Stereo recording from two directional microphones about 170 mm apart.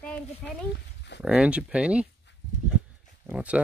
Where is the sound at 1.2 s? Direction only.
5° right (ahead or behind).